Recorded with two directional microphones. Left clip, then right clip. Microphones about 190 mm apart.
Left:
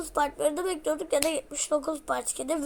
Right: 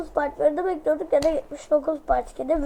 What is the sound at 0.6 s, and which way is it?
Speech, centre (ahead or behind).